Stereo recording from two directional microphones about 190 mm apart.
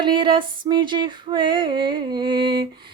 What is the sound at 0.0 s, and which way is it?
Mantra, 25° right (ahead or behind).